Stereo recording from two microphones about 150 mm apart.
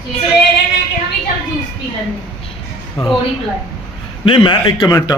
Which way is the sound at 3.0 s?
40° left (ahead or behind).